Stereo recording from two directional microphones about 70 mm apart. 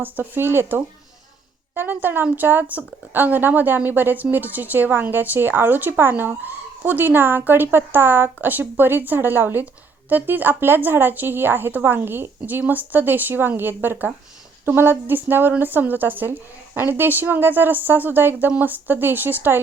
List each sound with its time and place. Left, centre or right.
0.0 s a woman's voice: right